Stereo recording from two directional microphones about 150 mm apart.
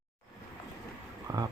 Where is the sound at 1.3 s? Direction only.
25° right (ahead or behind).